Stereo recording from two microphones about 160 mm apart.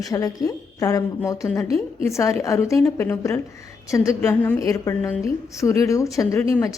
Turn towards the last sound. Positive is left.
turn(degrees=20)  # may be behind; listen again after turning